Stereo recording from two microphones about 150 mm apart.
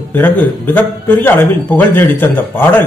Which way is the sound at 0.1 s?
15° left (ahead or behind).